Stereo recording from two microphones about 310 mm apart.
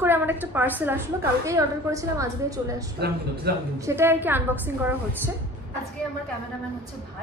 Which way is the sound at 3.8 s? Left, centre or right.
Centre.